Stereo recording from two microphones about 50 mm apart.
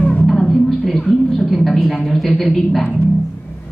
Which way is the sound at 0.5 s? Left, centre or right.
Centre.